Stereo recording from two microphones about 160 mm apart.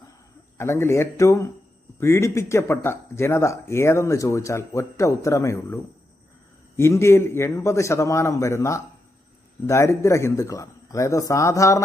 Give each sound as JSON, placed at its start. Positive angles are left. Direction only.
{"t": 0.5, "sound": "speech", "side_deg": 15}